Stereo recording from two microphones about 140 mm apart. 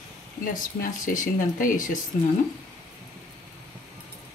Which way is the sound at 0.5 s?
75° left (ahead or behind).